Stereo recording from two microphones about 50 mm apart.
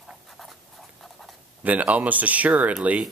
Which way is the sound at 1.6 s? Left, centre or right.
Right.